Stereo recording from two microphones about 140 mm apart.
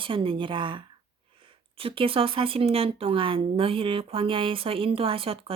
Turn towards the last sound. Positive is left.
turn(degrees=-45)  # may be behind; listen again after turning